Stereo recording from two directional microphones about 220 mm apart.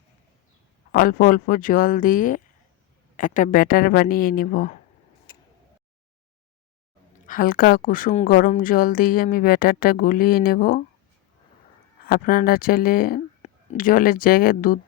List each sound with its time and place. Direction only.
0.9 s a woman's voice: 40° left (ahead or behind)
7.3 s a woman's voice: 40° left (ahead or behind)
12.0 s a woman's voice: 40° left (ahead or behind)